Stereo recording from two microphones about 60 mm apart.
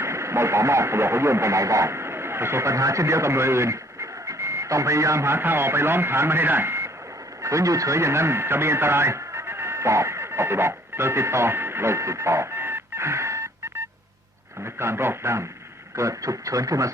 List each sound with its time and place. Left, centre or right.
0.0 s speech: right
7.4 s speech: right
16.0 s speech: right